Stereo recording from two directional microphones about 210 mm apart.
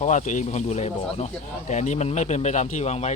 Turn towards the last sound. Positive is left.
turn(degrees=30)  # may be behind; listen again after turning